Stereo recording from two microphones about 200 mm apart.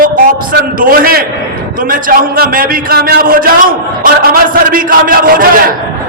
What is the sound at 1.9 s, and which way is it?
A man's voice, 45° right (ahead or behind).